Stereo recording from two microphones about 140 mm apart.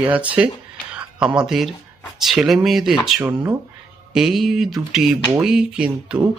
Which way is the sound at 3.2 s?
20° right (ahead or behind).